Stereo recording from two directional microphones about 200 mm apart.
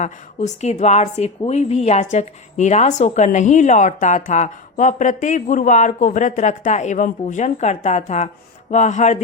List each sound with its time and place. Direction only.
0.0 s a woman's voice: 35° left (ahead or behind)